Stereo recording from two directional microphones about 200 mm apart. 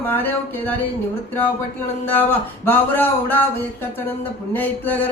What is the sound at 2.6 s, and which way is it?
Speech, 10° left (ahead or behind).